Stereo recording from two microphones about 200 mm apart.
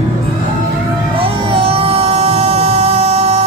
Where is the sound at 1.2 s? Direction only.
30° right (ahead or behind).